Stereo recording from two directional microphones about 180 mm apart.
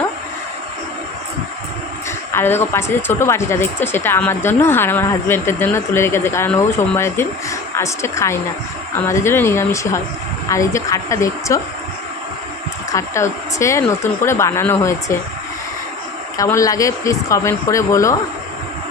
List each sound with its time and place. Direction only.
2.3 s speech: 15° left (ahead or behind)
12.9 s speech: 15° left (ahead or behind)
16.4 s speech: 20° left (ahead or behind)